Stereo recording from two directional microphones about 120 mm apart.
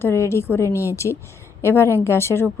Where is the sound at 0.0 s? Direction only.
20° left (ahead or behind).